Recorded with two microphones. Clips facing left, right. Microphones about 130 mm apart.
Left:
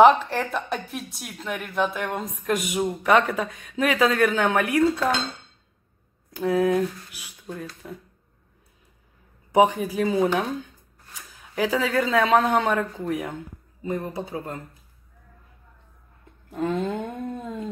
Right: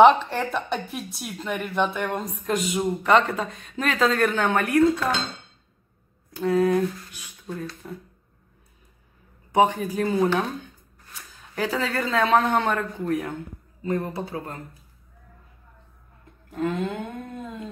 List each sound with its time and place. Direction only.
0.0 s speech: centre (ahead or behind)
6.4 s speech: 15° left (ahead or behind)
9.7 s speech: 10° left (ahead or behind)
11.5 s speech: 10° left (ahead or behind)
13.9 s a sound: 20° left (ahead or behind)
16.4 s a sound: 30° left (ahead or behind)